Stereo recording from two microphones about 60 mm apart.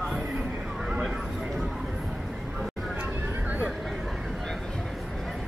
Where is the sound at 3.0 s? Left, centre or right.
Right.